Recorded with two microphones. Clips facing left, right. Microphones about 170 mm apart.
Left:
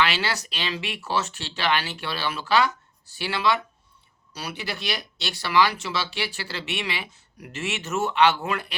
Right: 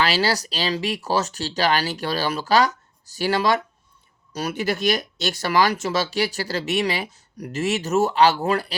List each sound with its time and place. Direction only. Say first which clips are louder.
0.0 s speech: right 4 dB; 35° right (ahead or behind)